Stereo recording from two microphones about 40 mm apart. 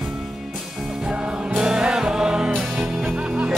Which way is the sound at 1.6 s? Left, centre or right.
Right.